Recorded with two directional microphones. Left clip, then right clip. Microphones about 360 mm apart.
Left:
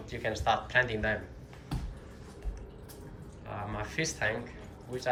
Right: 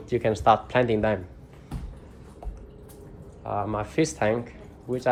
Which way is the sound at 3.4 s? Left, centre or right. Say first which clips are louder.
Right 10 dB; centre.